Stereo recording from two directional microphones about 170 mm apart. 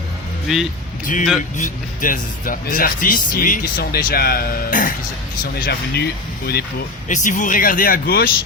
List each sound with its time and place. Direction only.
0.4 s speech: centre (ahead or behind)
1.0 s speech: 50° left (ahead or behind)
5.5 s speech: 65° left (ahead or behind)
7.1 s speech: 50° left (ahead or behind)